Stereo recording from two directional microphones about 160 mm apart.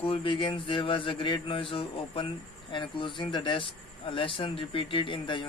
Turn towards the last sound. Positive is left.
turn(degrees=30)  # may be behind; listen again after turning